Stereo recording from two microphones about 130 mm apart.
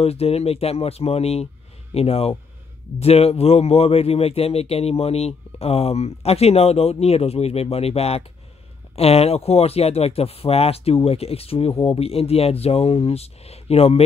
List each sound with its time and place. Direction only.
0.0 s a man's voice: 50° left (ahead or behind)